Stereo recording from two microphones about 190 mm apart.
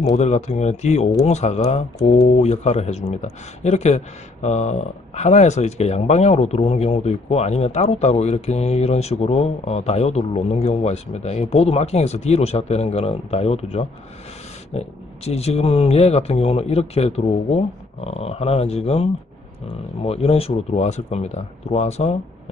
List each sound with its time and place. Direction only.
0.1 s speech: 35° left (ahead or behind)